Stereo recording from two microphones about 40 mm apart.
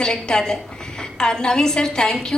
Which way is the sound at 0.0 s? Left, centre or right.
Centre.